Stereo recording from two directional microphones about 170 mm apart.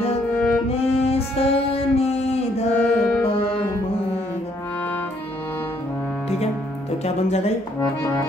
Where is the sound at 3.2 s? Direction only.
30° left (ahead or behind).